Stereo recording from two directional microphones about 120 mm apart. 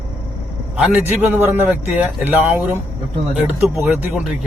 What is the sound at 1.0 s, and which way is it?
Speech, 15° right (ahead or behind).